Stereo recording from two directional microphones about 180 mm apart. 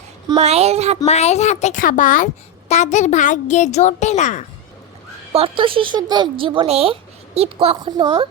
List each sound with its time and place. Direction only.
0.3 s speech: 35° right (ahead or behind)
1.0 s a woman's voice: 40° left (ahead or behind)
5.3 s a woman's voice: 30° right (ahead or behind)